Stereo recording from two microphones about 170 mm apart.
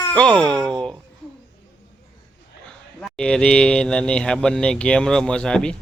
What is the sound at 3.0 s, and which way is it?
Speech, 5° left (ahead or behind).